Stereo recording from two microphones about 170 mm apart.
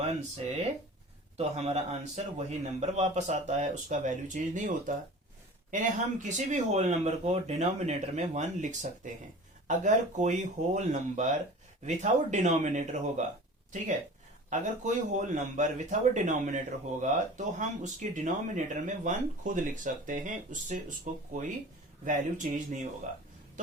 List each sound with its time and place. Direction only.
1.4 s a man's voice: 40° right (ahead or behind)
14.5 s speech: 45° right (ahead or behind)